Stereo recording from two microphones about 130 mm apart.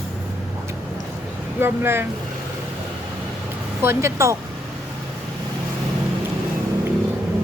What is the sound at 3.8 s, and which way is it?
Speech, 20° right (ahead or behind).